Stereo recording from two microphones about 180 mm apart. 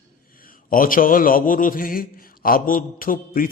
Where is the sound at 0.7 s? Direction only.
50° left (ahead or behind).